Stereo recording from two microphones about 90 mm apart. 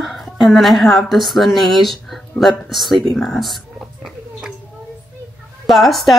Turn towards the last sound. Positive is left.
turn(degrees=0)  # may be behind; listen again after turning